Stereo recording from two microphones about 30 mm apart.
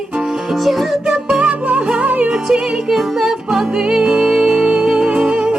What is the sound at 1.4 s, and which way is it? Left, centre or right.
Music, right.